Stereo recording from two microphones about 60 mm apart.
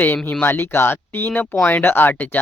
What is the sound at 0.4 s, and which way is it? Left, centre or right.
Speech, left.